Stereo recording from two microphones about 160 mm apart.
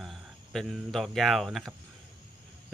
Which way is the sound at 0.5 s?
Centre (ahead or behind).